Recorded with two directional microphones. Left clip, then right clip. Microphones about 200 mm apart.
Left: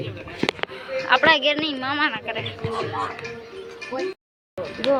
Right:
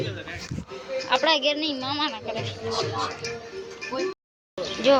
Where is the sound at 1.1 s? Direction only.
Centre (ahead or behind).